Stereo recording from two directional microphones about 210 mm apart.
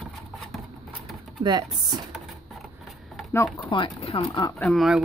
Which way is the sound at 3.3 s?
10° left (ahead or behind).